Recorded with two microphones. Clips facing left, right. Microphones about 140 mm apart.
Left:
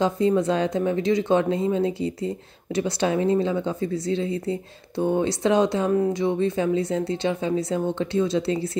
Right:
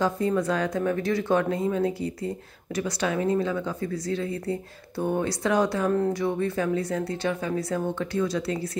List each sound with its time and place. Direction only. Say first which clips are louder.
0.0 s speech: left 4 dB; 20° left (ahead or behind)
5.9 s speech: left 2 dB; 10° left (ahead or behind)
6.1 s speech: left 3 dB; 20° left (ahead or behind)